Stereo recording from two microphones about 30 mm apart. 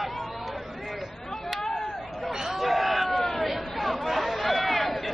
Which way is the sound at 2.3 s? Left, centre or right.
Centre.